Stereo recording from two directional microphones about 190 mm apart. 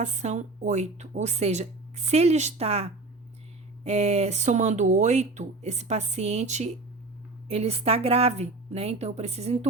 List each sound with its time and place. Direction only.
0.0 s a woman's voice: 40° right (ahead or behind)